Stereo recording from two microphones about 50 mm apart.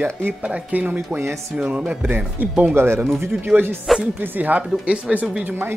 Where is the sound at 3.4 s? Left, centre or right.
Right.